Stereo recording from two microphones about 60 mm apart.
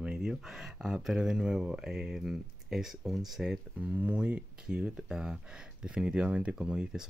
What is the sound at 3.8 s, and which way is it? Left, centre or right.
Speech, right.